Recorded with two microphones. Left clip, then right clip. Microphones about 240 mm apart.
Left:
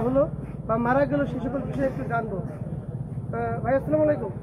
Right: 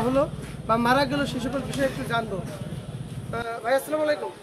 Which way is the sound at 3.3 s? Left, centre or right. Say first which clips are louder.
Even; right.